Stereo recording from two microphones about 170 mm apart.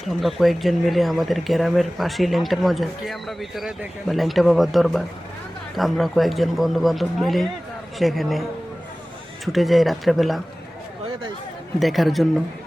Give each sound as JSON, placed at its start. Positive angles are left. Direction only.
{"t": 0.1, "sound": "speech", "side_deg": 0}
{"t": 9.5, "sound": "speech", "side_deg": 0}
{"t": 11.8, "sound": "speech", "side_deg": 0}